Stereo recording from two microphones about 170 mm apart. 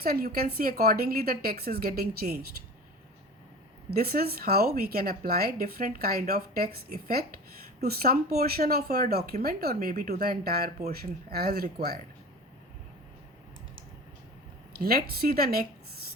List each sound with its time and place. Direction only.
0.0 s speech: 65° right (ahead or behind)
3.8 s speech: 65° right (ahead or behind)
14.8 s speech: 65° right (ahead or behind)